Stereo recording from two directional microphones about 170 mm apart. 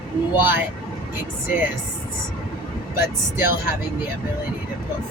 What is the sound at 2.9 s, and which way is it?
Speech, 15° right (ahead or behind).